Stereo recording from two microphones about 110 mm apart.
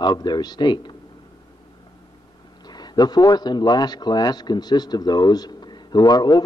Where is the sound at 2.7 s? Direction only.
40° left (ahead or behind).